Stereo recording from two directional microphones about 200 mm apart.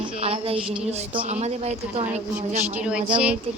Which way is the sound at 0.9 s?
30° right (ahead or behind).